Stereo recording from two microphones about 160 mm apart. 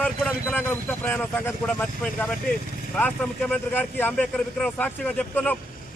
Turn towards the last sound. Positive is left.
turn(degrees=10)  # may be behind; listen again after turning